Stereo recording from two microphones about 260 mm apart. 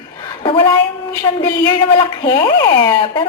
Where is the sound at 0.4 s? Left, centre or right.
Centre.